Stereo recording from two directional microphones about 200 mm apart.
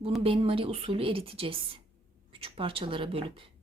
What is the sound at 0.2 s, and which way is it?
A woman's voice, 25° right (ahead or behind).